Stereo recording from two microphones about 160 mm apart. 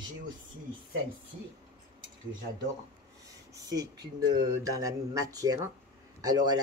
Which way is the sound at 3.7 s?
20° right (ahead or behind).